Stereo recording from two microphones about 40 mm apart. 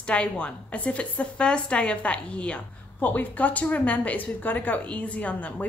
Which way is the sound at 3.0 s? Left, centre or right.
Left.